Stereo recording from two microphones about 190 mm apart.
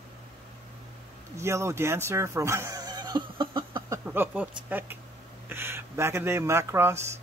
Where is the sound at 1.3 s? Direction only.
15° right (ahead or behind).